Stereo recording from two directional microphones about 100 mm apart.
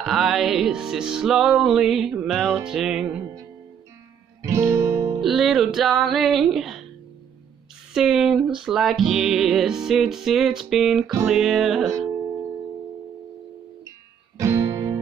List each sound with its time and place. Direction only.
0.0 s music: centre (ahead or behind)
4.4 s music: 30° right (ahead or behind)
5.2 s music: centre (ahead or behind)
7.9 s music: 5° right (ahead or behind)
14.4 s music: 30° right (ahead or behind)